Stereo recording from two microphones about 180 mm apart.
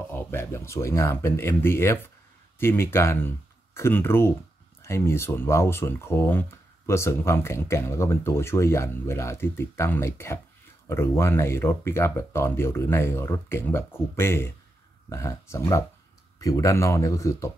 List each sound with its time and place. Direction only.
0.1 s speech: 15° left (ahead or behind)